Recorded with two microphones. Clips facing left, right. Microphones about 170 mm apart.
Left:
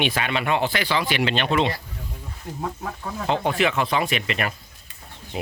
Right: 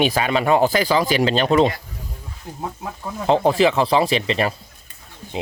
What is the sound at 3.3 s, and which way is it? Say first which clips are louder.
Speech: right 7 dB; 35° right (ahead or behind).